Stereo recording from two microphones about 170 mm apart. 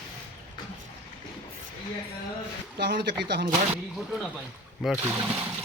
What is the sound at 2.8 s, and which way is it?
Speech, 90° right.